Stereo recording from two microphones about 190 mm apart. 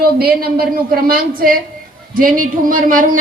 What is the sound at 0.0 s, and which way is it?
A woman's voice, 55° right (ahead or behind).